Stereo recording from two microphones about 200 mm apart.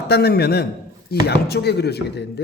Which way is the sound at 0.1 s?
50° left (ahead or behind).